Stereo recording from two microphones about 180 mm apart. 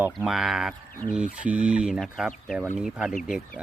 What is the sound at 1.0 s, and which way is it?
Speech, 35° right (ahead or behind).